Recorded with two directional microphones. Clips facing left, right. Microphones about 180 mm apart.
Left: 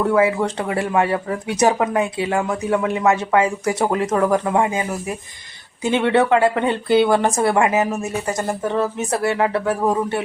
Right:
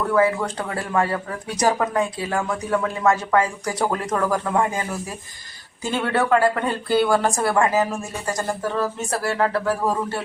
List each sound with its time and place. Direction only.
0.1 s a woman's voice: 25° left (ahead or behind)